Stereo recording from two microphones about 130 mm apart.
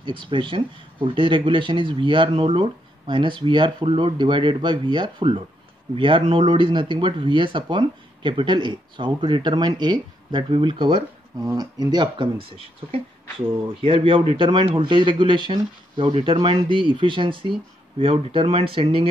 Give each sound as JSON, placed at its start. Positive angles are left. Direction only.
{"t": 0.0, "sound": "speech", "side_deg": -40}